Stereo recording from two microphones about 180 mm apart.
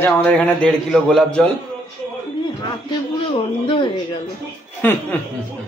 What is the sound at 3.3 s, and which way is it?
Speech, 30° left (ahead or behind).